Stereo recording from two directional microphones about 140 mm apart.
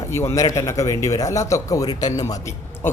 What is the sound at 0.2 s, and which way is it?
A man's voice, 20° left (ahead or behind).